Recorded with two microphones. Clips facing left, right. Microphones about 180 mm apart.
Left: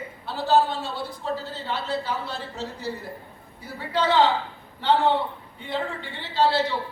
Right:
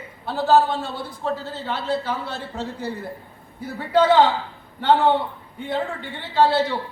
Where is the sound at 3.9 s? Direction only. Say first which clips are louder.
Right 6 dB; 50° right (ahead or behind).